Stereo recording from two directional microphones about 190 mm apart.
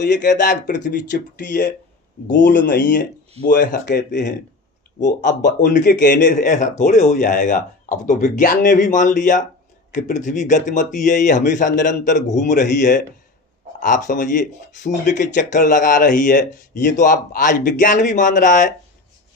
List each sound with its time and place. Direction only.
0.1 s speech: 40° left (ahead or behind)
2.4 s speech: 45° left (ahead or behind)
3.8 s speech: 65° left (ahead or behind)
4.9 s speech: 40° left (ahead or behind)